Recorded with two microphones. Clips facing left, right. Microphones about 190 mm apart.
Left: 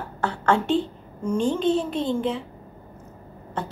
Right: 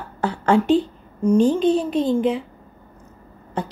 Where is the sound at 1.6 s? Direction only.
20° left (ahead or behind).